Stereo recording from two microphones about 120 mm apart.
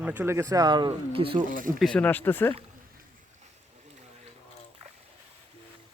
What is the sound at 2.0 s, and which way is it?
Speech, 15° left (ahead or behind).